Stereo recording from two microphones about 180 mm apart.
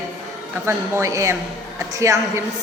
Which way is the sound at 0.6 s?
15° right (ahead or behind).